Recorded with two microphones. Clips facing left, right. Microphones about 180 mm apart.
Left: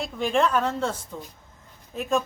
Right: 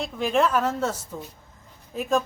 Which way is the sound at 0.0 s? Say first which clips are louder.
Right 1 dB; centre (ahead or behind).